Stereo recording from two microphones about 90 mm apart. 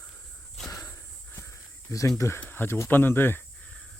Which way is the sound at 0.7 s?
35° left (ahead or behind).